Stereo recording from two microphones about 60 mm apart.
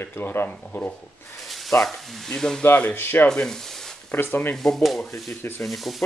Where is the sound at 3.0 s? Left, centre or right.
Left.